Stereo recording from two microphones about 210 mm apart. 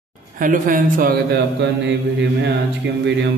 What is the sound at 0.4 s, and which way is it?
Speech, 40° right (ahead or behind).